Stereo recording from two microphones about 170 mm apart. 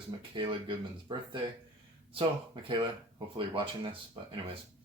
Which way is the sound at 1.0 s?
30° right (ahead or behind).